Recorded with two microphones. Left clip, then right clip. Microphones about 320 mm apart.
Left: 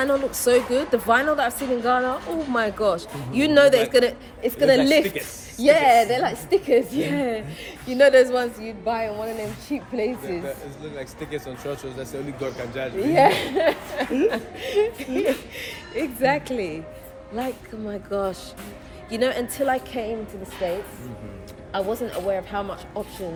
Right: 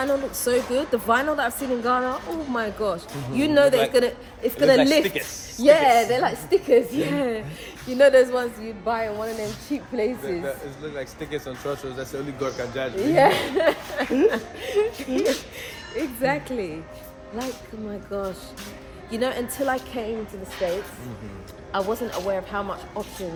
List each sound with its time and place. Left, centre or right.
0.0 s speech: centre
5.0 s speech: centre
5.6 s speech: centre
18.1 s speech: centre
21.7 s speech: centre